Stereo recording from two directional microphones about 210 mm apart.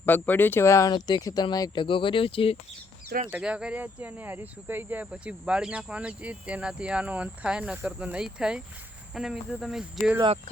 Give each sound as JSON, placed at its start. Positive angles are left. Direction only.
{"t": 0.0, "sound": "speech", "side_deg": 10}
{"t": 3.3, "sound": "speech", "side_deg": -5}